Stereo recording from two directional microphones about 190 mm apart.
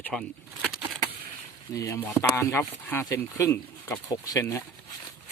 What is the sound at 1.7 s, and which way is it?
Speech, 15° left (ahead or behind).